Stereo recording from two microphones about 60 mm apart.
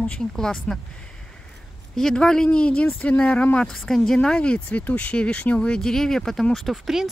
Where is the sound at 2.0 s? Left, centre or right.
Centre.